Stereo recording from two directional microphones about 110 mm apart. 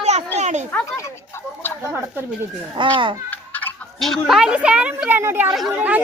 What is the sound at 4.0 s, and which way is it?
A woman's voice, centre (ahead or behind).